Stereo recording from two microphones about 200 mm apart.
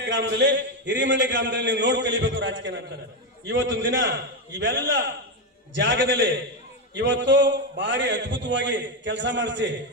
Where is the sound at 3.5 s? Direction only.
65° right (ahead or behind).